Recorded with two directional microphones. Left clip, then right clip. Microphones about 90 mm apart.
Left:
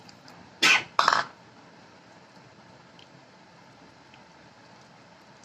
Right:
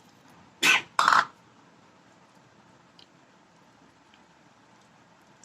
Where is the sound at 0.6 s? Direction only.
30° right (ahead or behind).